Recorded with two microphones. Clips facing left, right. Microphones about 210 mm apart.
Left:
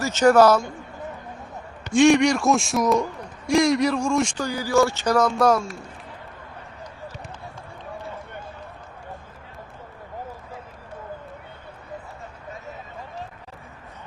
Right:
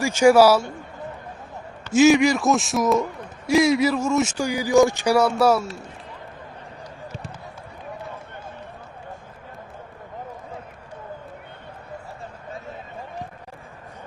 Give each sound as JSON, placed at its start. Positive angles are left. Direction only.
{"t": 0.0, "sound": "speech", "side_deg": -10}
{"t": 1.9, "sound": "a man's voice", "side_deg": -5}